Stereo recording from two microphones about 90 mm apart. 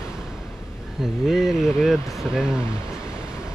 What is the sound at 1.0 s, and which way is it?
Speech, centre (ahead or behind).